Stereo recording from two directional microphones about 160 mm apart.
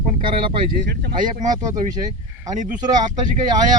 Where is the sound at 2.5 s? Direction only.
25° right (ahead or behind).